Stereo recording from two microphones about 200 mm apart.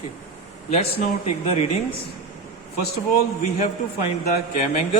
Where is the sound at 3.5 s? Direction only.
35° left (ahead or behind).